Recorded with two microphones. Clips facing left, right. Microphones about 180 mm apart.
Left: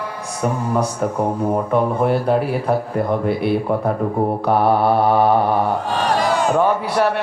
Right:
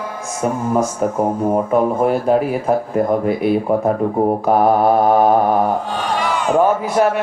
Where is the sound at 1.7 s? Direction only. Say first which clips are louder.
Right 1 dB; 45° right (ahead or behind).